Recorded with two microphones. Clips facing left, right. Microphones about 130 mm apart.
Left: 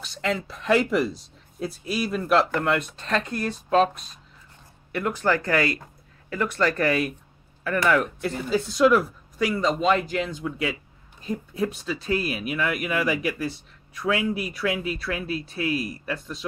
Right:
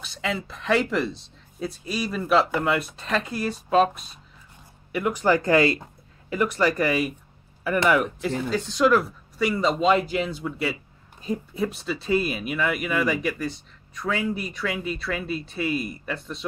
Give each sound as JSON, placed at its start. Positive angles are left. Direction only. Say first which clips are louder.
{"t": 0.0, "sound": "speech", "louder": "left 2 dB", "side_deg": -5}
{"t": 8.3, "sound": "speech", "louder": "even", "side_deg": 5}